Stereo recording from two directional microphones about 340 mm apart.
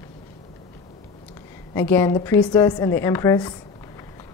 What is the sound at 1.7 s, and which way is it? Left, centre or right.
A woman's voice, centre.